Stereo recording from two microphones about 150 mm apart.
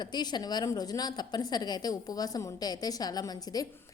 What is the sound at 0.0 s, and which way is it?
A woman's voice, 30° left (ahead or behind).